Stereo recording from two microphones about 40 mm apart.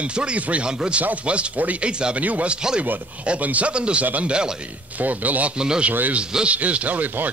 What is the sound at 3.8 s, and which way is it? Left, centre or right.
Speech, right.